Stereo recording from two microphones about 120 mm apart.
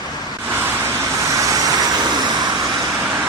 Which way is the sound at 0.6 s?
25° right (ahead or behind).